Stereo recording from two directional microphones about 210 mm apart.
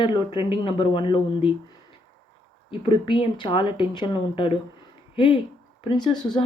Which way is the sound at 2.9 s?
20° left (ahead or behind).